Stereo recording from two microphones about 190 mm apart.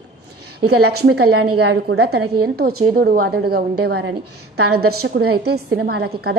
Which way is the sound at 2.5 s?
55° right (ahead or behind).